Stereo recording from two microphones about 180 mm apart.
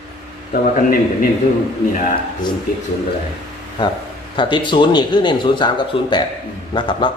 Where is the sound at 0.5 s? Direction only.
50° left (ahead or behind).